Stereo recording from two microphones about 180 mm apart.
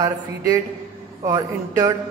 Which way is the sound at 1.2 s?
20° right (ahead or behind).